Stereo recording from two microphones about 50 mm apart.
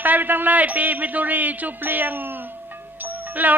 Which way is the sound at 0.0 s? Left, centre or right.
Right.